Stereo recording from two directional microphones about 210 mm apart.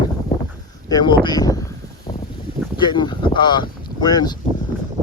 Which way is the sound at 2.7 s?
20° left (ahead or behind).